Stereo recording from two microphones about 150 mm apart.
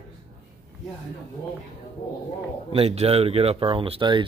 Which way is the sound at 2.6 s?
40° right (ahead or behind).